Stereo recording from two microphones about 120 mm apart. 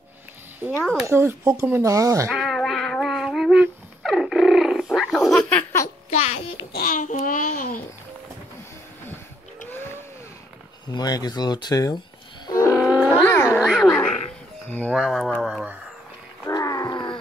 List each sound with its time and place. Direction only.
0.6 s a child's voice: 15° right (ahead or behind)
2.3 s a sound: centre (ahead or behind)
6.0 s a sound: 65° left (ahead or behind)
6.9 s a child's voice: 90° left
10.9 s speech: 35° left (ahead or behind)
12.4 s wild animals: 25° left (ahead or behind)
12.7 s wild animals: 5° left (ahead or behind)
13.3 s cat: 25° left (ahead or behind)
13.6 s a sound: centre (ahead or behind)
14.7 s speech: 10° left (ahead or behind)
15.0 s speech: centre (ahead or behind)
16.4 s wild animals: 30° left (ahead or behind)